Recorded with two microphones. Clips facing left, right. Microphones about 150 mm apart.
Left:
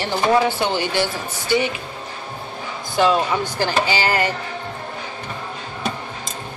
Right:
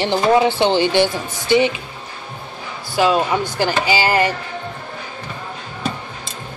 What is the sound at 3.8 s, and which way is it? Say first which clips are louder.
Speech: right 3 dB; 15° right (ahead or behind).